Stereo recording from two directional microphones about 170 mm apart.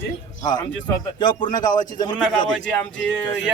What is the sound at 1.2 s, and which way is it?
A man's voice, 30° left (ahead or behind).